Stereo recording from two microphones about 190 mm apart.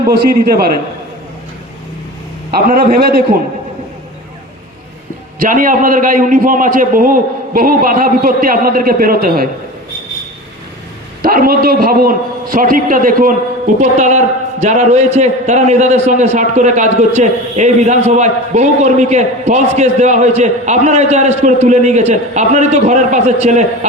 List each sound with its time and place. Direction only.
0.1 s a man's voice: 55° right (ahead or behind)
2.6 s a man's voice: 55° right (ahead or behind)
5.4 s a man's voice: 45° right (ahead or behind)
11.2 s a man's voice: 50° right (ahead or behind)